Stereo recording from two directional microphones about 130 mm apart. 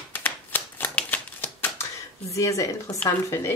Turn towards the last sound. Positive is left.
turn(degrees=20)  # may be behind; listen again after turning